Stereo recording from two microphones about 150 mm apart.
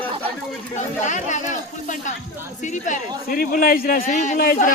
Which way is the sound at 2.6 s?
55° left (ahead or behind).